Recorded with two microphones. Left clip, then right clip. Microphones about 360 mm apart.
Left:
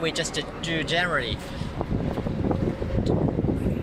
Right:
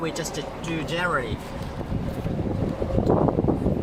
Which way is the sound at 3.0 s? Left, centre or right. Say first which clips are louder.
Right 5 dB; right.